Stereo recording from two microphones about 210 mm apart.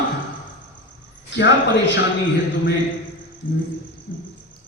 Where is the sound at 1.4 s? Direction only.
55° left (ahead or behind).